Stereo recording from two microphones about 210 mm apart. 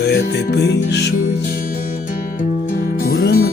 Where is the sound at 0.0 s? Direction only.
50° left (ahead or behind).